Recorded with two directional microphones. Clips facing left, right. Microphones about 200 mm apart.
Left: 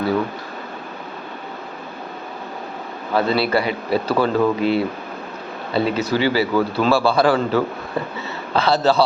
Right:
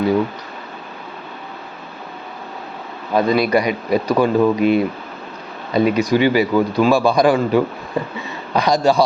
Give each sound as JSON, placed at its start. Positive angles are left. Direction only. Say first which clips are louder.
{"t": 3.2, "sound": "a man's voice", "louder": "right 3 dB", "side_deg": -15}